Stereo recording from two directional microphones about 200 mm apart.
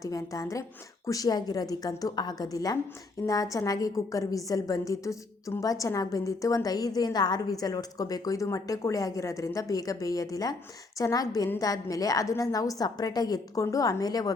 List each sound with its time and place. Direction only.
0.0 s a woman's voice: 15° left (ahead or behind)